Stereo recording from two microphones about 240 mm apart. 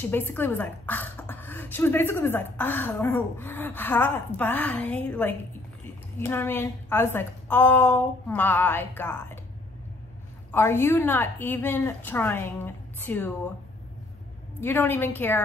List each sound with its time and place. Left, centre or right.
0.1 s speech: centre
10.5 s speech: centre
14.6 s speech: centre